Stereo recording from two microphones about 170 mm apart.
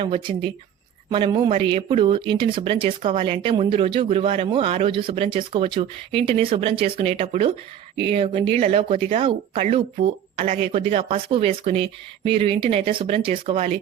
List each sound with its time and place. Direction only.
0.0 s speech: 30° right (ahead or behind)